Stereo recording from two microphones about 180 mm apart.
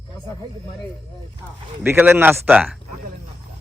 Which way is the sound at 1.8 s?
10° right (ahead or behind).